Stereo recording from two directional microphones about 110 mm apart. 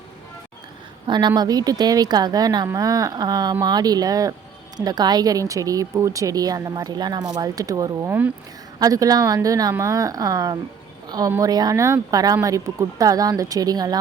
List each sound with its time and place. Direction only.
1.0 s a woman's voice: 45° right (ahead or behind)